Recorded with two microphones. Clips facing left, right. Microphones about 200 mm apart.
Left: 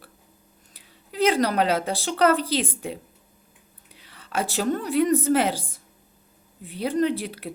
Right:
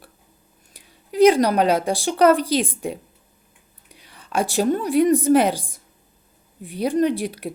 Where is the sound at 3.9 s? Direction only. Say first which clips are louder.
Right 4 dB; 15° right (ahead or behind).